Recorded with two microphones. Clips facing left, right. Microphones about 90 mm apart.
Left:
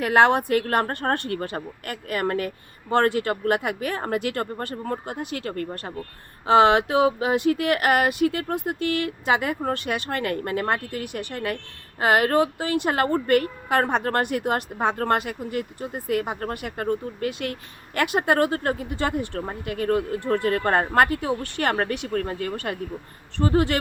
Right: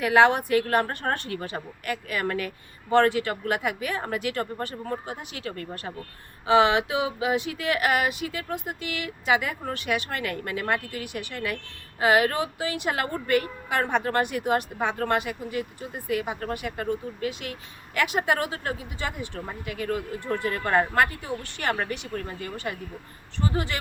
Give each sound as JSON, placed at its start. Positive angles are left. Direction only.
{"t": 0.0, "sound": "speech", "side_deg": 45}
{"t": 21.1, "sound": "speech", "side_deg": 65}